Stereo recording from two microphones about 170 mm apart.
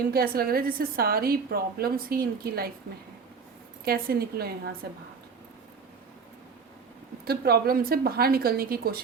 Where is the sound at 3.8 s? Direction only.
65° right (ahead or behind).